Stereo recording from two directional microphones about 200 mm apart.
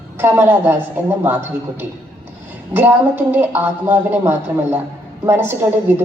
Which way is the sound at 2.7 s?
10° right (ahead or behind).